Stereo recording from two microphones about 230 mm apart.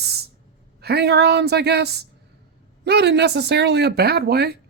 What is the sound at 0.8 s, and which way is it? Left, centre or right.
A woman's voice, right.